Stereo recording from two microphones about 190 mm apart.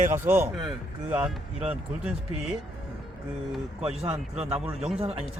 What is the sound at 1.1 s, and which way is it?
Speech, 5° right (ahead or behind).